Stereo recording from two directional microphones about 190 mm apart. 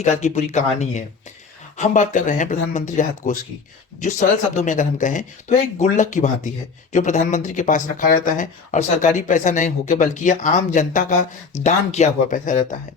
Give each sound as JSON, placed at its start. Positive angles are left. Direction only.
{"t": 0.0, "sound": "speech", "side_deg": 40}